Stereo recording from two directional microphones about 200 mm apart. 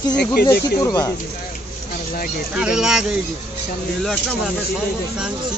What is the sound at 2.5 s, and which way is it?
Speech, 5° right (ahead or behind).